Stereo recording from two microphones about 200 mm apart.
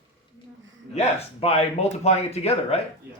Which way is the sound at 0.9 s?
30° left (ahead or behind).